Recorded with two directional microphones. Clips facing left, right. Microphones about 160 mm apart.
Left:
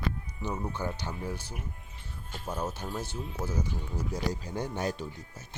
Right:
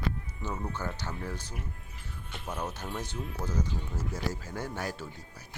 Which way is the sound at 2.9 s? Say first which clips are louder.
Left 1 dB; 10° left (ahead or behind).